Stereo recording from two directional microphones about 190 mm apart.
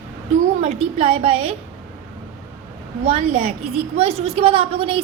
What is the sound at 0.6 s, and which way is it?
Speech, 30° right (ahead or behind).